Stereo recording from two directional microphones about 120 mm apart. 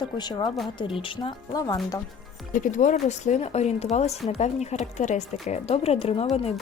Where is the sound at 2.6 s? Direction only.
90° left.